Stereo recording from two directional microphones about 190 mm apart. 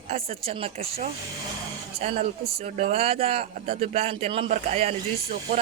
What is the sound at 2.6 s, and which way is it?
A woman's voice, 35° right (ahead or behind).